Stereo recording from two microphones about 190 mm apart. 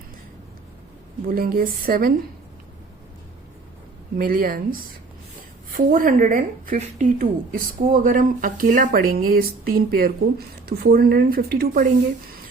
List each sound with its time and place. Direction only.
1.3 s speech: 50° right (ahead or behind)
4.2 s speech: 50° right (ahead or behind)
5.7 s speech: 45° right (ahead or behind)